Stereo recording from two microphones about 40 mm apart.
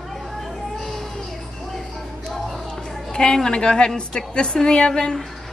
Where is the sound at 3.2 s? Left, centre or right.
Centre.